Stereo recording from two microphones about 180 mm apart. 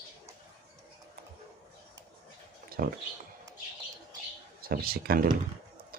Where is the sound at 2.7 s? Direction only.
55° right (ahead or behind).